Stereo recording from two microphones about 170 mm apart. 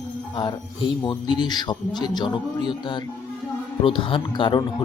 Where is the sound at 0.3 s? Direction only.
25° left (ahead or behind).